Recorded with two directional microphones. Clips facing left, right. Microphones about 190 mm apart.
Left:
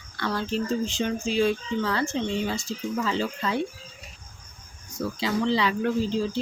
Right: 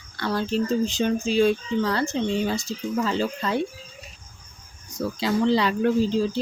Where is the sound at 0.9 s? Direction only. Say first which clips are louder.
Right 4 dB; 40° right (ahead or behind).